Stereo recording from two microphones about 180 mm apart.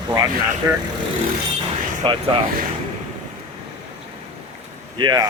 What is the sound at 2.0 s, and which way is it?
Speech, 30° right (ahead or behind).